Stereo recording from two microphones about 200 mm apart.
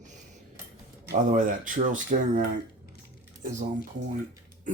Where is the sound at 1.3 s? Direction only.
40° right (ahead or behind).